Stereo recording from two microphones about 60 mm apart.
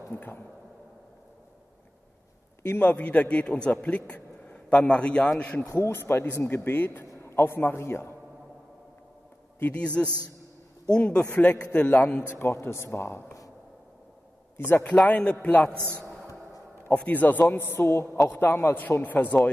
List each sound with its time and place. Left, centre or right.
0.1 s a man's voice: left
2.8 s a man's voice: left
5.8 s a man's voice: left
9.6 s a man's voice: left
12.2 s speech: left
14.6 s a man's voice: left
15.0 s a man's voice: left
15.7 s a man's voice: right
16.8 s a man's voice: left
18.8 s a man's voice: left